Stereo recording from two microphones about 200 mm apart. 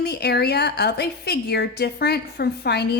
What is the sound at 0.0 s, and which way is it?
A woman's voice, 55° left (ahead or behind).